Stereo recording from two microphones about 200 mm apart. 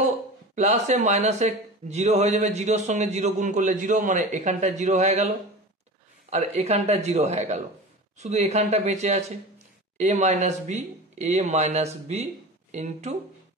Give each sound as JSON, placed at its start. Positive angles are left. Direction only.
{"t": 0.6, "sound": "speech", "side_deg": -35}
{"t": 6.3, "sound": "speech", "side_deg": -35}